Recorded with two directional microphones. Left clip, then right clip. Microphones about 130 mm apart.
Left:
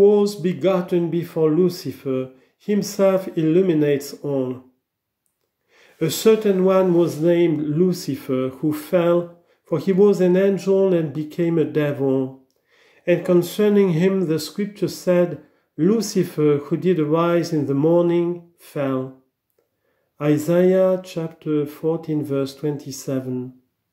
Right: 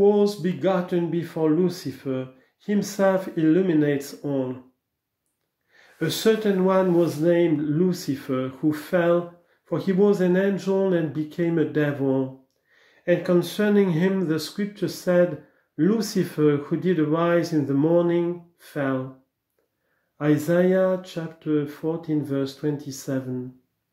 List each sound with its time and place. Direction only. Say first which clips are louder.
0.0 s speech: left 4 dB; 20° left (ahead or behind)
5.9 s speech: left 5 dB; 20° left (ahead or behind)
20.2 s speech: left 3 dB; 25° left (ahead or behind)